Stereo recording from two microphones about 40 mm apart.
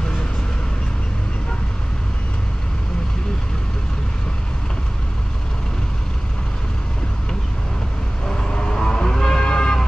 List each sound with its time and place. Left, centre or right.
8.3 s vehicle: centre